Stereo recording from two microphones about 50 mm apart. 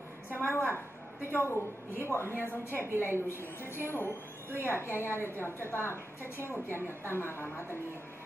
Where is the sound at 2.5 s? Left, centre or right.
Left.